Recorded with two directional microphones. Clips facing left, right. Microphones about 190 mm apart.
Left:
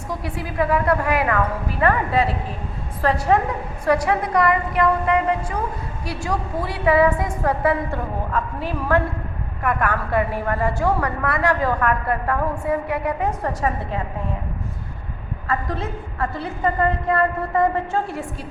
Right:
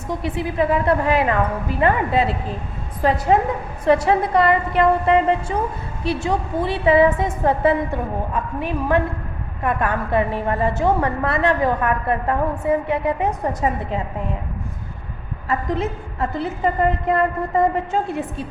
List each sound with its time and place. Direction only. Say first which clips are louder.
0.1 s a woman's voice: right 5 dB; 20° right (ahead or behind)
15.4 s a woman's voice: right 3 dB; 20° right (ahead or behind)